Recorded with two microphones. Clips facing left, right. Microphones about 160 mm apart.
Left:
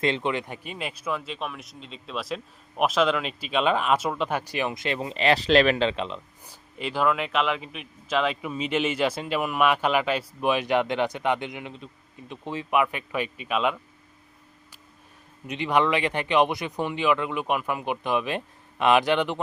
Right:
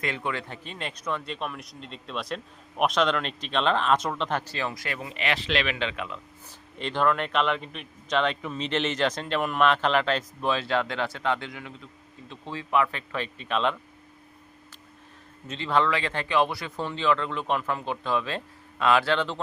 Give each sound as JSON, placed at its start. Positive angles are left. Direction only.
{"t": 0.0, "sound": "speech", "side_deg": 25}
{"t": 6.7, "sound": "speech", "side_deg": 5}
{"t": 15.4, "sound": "speech", "side_deg": 15}